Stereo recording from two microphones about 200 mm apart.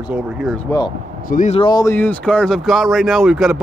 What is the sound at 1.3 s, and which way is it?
Speech, 40° left (ahead or behind).